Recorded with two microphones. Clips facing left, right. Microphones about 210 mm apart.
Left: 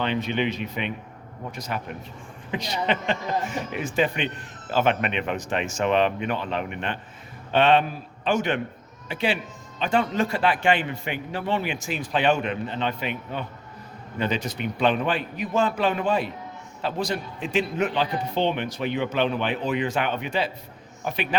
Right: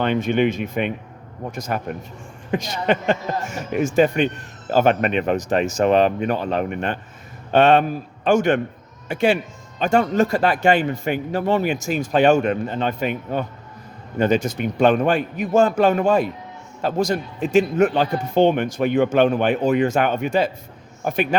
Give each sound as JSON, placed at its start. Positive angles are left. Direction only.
{"t": 0.0, "sound": "a man's voice", "side_deg": -50}